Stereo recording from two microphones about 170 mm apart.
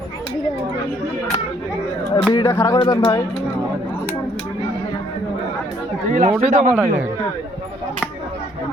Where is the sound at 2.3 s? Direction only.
25° left (ahead or behind).